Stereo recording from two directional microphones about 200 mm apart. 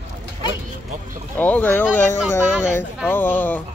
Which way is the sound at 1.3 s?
10° left (ahead or behind).